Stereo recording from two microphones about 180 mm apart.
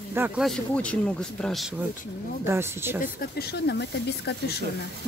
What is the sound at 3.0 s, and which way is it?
Speech, 55° left (ahead or behind).